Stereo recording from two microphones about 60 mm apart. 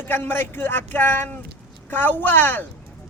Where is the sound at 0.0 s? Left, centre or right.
Left.